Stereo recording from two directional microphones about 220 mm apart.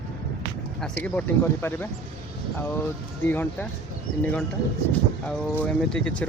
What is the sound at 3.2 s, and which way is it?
Speech, 10° left (ahead or behind).